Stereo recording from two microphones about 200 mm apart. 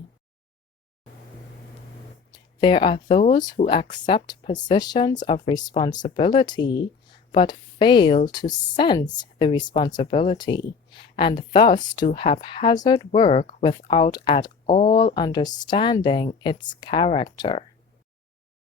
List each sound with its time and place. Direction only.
2.3 s speech: 25° left (ahead or behind)